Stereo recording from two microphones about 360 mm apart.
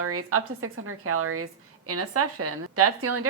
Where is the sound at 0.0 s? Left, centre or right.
Right.